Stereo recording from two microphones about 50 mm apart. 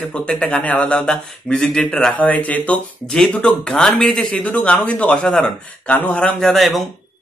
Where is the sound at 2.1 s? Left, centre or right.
Left.